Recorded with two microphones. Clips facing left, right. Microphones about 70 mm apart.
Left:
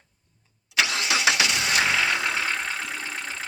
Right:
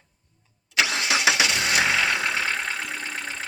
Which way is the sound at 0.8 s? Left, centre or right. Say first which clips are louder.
Right 1 dB; right.